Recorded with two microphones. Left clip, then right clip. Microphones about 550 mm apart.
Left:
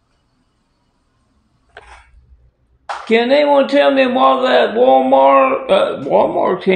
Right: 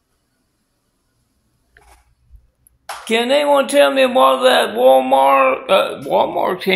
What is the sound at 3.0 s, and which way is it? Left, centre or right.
Speech, right.